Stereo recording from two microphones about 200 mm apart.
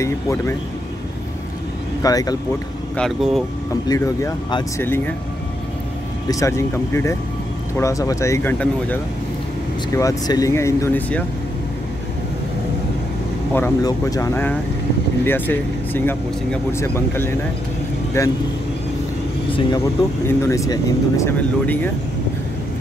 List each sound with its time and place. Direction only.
0.0 s speech: 15° left (ahead or behind)
2.0 s speech: 20° left (ahead or behind)
3.0 s speech: centre (ahead or behind)
3.9 s speech: 15° left (ahead or behind)
6.2 s speech: 15° left (ahead or behind)
9.9 s speech: 15° left (ahead or behind)
13.5 s speech: 15° left (ahead or behind)
20.2 s speech: 15° left (ahead or behind)